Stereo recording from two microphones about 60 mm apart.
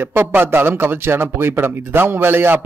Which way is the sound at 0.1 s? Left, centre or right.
Right.